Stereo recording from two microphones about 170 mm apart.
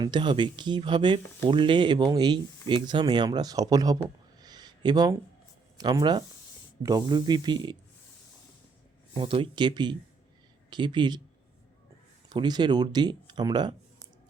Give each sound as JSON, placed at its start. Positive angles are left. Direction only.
{"t": 0.0, "sound": "speech", "side_deg": -25}
{"t": 4.4, "sound": "a sound", "side_deg": -25}
{"t": 5.7, "sound": "speech", "side_deg": -25}
{"t": 9.1, "sound": "speech", "side_deg": -30}
{"t": 12.3, "sound": "speech", "side_deg": -25}